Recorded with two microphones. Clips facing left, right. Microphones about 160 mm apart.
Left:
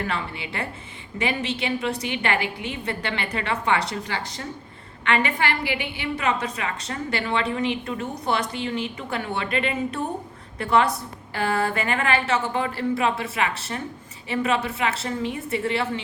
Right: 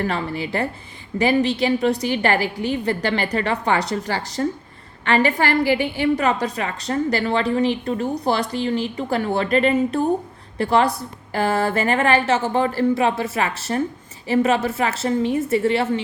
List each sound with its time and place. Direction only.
0.0 s a woman's voice: 40° right (ahead or behind)